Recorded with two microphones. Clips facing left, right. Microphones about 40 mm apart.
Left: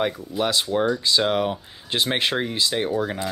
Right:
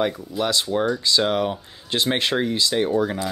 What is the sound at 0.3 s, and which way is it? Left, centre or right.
Speech, centre.